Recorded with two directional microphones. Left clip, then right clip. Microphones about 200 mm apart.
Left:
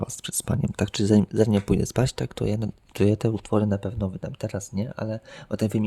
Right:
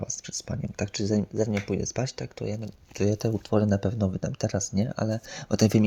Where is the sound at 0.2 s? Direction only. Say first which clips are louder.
Left 5 dB; 30° left (ahead or behind).